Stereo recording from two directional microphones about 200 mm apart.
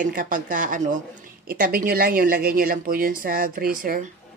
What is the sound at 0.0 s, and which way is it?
A woman's voice, 45° right (ahead or behind).